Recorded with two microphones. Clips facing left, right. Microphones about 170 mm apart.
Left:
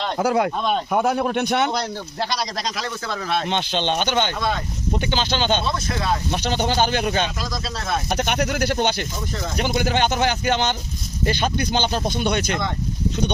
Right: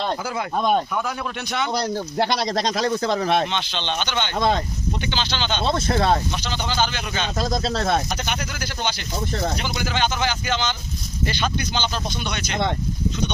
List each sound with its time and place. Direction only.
0.2 s speech: 65° left (ahead or behind)
0.9 s speech: 50° left (ahead or behind)
2.3 s speech: 25° right (ahead or behind)
2.7 s speech: 40° right (ahead or behind)
3.5 s speech: 50° left (ahead or behind)
5.6 s speech: 30° right (ahead or behind)
6.4 s speech: 50° left (ahead or behind)
8.1 s speech: 60° left (ahead or behind)